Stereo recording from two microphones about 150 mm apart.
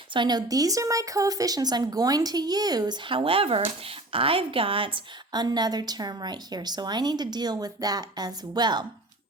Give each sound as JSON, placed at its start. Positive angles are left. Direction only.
{"t": 0.1, "sound": "speech", "side_deg": -30}